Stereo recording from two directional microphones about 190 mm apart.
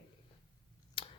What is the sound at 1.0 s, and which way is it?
Scissors, 25° left (ahead or behind).